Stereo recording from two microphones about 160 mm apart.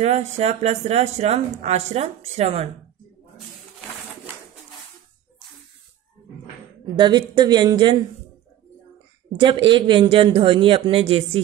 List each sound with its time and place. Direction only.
0.0 s speech: 45° right (ahead or behind)
7.0 s speech: 30° right (ahead or behind)
9.4 s speech: 30° right (ahead or behind)